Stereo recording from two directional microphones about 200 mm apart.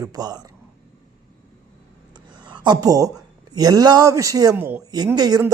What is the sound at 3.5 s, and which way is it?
Speech, 20° right (ahead or behind).